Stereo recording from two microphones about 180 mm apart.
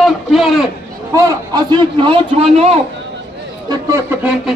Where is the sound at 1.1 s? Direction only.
20° right (ahead or behind); by 2.8 s 35° right (ahead or behind).